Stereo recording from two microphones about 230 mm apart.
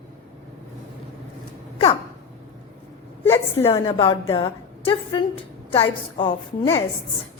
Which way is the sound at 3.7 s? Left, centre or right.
Left.